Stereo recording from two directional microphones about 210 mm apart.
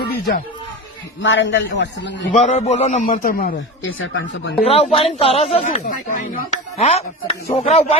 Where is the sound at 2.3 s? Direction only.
35° left (ahead or behind).